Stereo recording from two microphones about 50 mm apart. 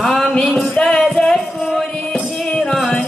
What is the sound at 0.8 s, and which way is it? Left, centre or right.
Music, centre.